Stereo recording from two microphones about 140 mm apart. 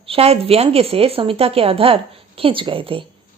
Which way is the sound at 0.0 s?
45° right (ahead or behind).